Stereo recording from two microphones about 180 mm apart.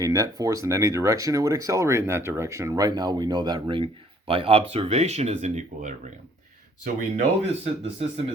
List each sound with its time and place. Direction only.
0.0 s speech: 20° right (ahead or behind); by 8.0 s 35° right (ahead or behind)